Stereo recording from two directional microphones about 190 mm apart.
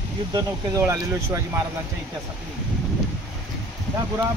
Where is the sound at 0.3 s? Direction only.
15° right (ahead or behind).